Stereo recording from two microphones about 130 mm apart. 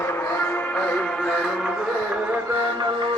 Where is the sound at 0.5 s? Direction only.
10° left (ahead or behind).